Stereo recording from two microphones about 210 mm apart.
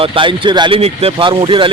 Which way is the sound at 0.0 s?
25° right (ahead or behind).